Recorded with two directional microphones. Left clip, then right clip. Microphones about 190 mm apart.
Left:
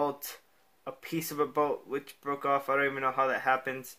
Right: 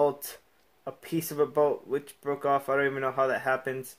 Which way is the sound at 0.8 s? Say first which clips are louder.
Right 3 dB; 40° right (ahead or behind).